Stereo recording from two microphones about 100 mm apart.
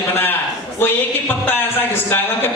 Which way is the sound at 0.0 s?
25° left (ahead or behind).